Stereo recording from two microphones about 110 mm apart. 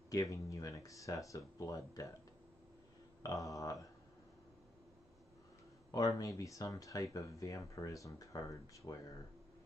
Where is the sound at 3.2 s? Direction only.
30° left (ahead or behind).